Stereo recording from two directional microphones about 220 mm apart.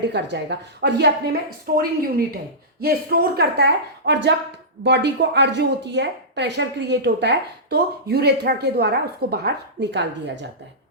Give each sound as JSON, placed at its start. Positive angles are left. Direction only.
{"t": 0.1, "sound": "a woman's voice", "side_deg": -50}